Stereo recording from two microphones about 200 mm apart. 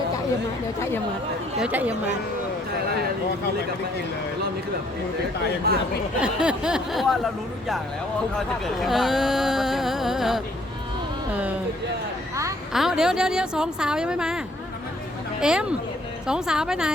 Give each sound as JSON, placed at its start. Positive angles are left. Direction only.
{"t": 0.8, "sound": "speech", "side_deg": 10}
{"t": 1.5, "sound": "a woman's voice", "side_deg": -5}
{"t": 5.7, "sound": "speech", "side_deg": -55}
{"t": 6.1, "sound": "speech", "side_deg": -5}
{"t": 8.4, "sound": "a woman's voice", "side_deg": 0}
{"t": 12.7, "sound": "speech", "side_deg": 0}